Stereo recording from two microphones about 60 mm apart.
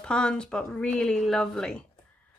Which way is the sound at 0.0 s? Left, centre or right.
Centre.